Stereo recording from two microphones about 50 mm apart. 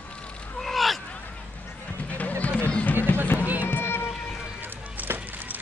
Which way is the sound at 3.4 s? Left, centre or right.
Right.